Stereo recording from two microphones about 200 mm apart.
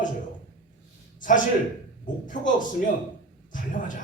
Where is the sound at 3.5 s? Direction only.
40° left (ahead or behind).